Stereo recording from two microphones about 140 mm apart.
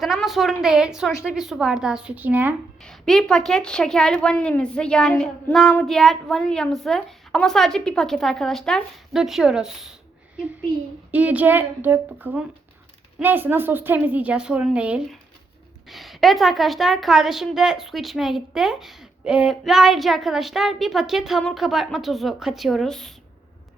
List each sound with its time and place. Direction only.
0.0 s a woman's voice: centre (ahead or behind)
2.8 s a woman's voice: 5° left (ahead or behind)
11.1 s a woman's voice: 10° right (ahead or behind)